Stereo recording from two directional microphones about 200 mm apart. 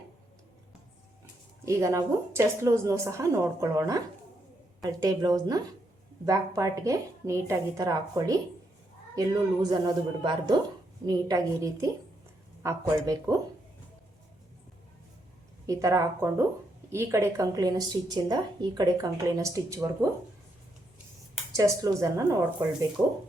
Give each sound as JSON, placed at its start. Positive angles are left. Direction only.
{"t": 1.6, "sound": "a woman's voice", "side_deg": -15}
{"t": 15.6, "sound": "a woman's voice", "side_deg": -15}
{"t": 21.5, "sound": "a woman's voice", "side_deg": -15}